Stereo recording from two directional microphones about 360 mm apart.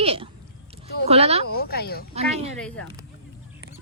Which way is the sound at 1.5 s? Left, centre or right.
Left.